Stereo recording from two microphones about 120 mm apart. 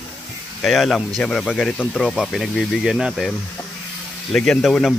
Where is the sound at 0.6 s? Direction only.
Centre (ahead or behind).